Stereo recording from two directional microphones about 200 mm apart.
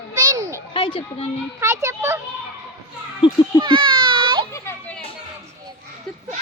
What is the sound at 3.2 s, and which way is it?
Speech, 20° left (ahead or behind).